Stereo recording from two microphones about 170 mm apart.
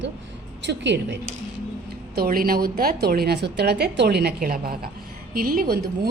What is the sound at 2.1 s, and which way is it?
A woman's voice, 60° right (ahead or behind).